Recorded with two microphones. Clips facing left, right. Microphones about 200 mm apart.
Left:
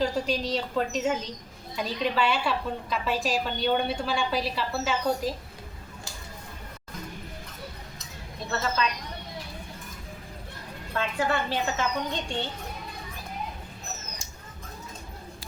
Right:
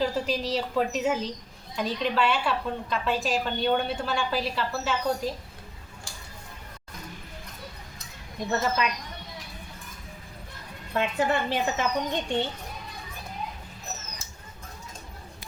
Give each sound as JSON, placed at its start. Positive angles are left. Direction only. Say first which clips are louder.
{"t": 0.0, "sound": "a woman's voice", "louder": "even", "side_deg": -5}
{"t": 8.4, "sound": "a woman's voice", "louder": "right 2 dB", "side_deg": -15}
{"t": 10.9, "sound": "a woman's voice", "louder": "right 2 dB", "side_deg": -20}